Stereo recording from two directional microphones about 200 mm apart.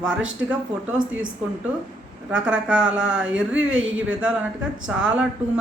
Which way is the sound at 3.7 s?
75° right (ahead or behind).